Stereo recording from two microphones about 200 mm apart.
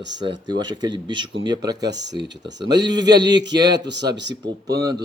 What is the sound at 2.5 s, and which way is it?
A man's voice, 20° right (ahead or behind).